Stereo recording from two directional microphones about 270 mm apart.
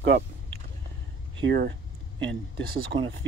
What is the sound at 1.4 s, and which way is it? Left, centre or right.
Speech, right.